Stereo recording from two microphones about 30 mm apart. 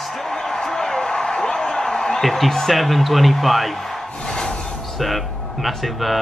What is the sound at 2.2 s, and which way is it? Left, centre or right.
A man's voice, centre.